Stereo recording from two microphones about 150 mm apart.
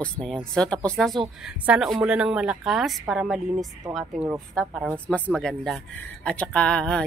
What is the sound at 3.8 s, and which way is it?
Speech, 25° right (ahead or behind).